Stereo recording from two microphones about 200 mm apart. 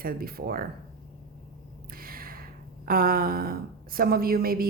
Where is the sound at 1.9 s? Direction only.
45° right (ahead or behind).